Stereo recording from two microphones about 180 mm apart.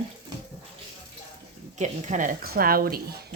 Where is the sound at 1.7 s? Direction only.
40° right (ahead or behind).